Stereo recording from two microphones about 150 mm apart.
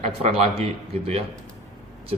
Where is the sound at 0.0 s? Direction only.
45° right (ahead or behind).